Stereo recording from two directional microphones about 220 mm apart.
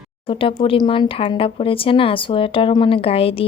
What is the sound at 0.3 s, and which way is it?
Speech, 25° left (ahead or behind).